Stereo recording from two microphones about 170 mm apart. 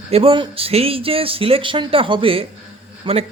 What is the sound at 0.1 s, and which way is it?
Speech, 30° right (ahead or behind).